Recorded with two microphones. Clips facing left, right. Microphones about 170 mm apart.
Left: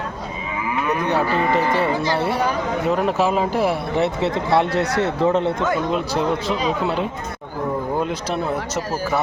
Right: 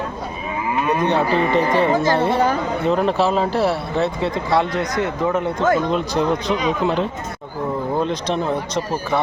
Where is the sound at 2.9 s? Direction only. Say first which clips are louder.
Right 2 dB; 10° left (ahead or behind); by 5.5 s 25° left (ahead or behind).